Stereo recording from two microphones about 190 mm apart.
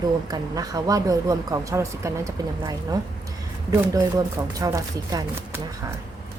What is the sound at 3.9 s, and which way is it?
A woman's voice, 20° right (ahead or behind).